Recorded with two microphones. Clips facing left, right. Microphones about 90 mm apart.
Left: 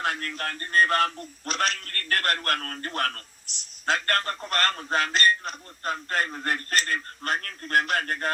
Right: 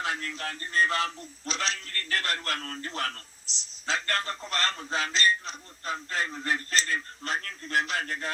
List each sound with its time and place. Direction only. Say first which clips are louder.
0.0 s a man's voice: left 3 dB; 55° left (ahead or behind)